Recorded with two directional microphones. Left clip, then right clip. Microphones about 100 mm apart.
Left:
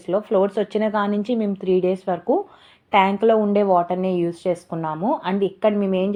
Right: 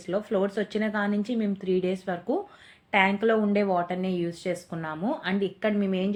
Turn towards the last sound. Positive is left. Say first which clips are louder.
# left 8 dB
turn(degrees=30)  # may be behind; listen again after turning